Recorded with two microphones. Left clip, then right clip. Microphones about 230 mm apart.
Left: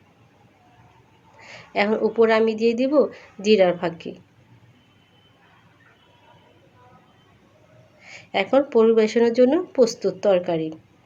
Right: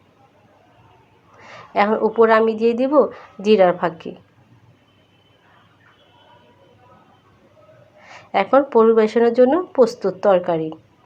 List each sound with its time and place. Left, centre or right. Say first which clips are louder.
1.5 s speech: right 4 dB; centre
8.0 s a sound: right 1 dB; right
8.3 s speech: right 4 dB; centre